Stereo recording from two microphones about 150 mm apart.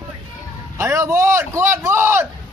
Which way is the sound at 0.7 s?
20° right (ahead or behind).